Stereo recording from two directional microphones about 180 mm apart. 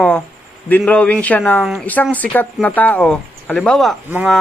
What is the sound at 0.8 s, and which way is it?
A man's voice, 5° left (ahead or behind).